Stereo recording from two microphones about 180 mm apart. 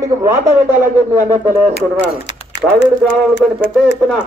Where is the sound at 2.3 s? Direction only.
80° left.